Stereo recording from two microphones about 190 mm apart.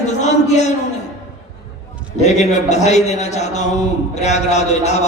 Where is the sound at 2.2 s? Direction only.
35° left (ahead or behind).